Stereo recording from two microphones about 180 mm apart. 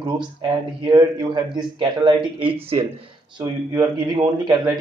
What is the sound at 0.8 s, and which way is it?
A man's voice, 25° right (ahead or behind).